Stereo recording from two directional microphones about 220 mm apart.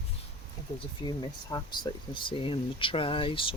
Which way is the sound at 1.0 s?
20° left (ahead or behind).